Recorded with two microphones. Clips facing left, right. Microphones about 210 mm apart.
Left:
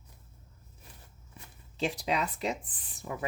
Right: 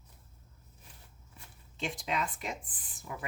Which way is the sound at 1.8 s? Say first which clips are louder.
Left 4 dB; 35° left (ahead or behind).